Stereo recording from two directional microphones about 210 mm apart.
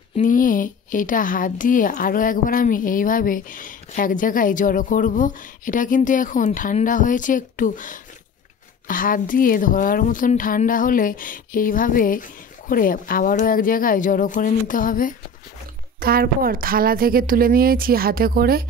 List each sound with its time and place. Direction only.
0.2 s a woman's voice: 40° left (ahead or behind)
16.0 s a woman's voice: 45° right (ahead or behind)